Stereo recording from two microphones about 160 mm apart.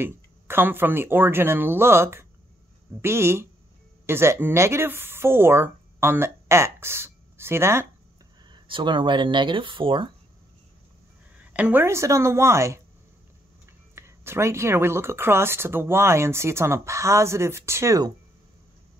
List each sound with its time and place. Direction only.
0.0 s speech: 15° right (ahead or behind)
8.5 s speech: 30° right (ahead or behind)
11.3 s speech: 10° right (ahead or behind)
13.9 s speech: 15° right (ahead or behind)